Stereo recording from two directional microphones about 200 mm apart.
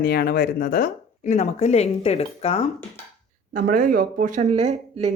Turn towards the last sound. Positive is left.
turn(degrees=-35)  # may be behind; listen again after turning